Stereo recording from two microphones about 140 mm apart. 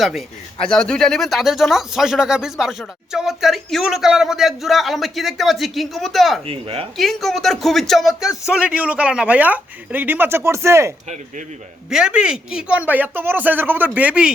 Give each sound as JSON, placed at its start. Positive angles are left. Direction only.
{"t": 0.0, "sound": "speech", "side_deg": 0}
{"t": 6.4, "sound": "speech", "side_deg": -45}
{"t": 6.9, "sound": "a man's voice", "side_deg": 0}
{"t": 11.9, "sound": "a man's voice", "side_deg": -5}